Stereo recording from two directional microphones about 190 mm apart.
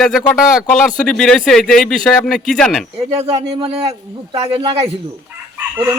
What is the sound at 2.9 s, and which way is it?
A man's voice, 30° right (ahead or behind).